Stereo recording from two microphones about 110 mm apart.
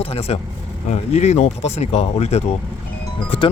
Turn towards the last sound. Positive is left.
turn(degrees=50)  # may be behind; listen again after turning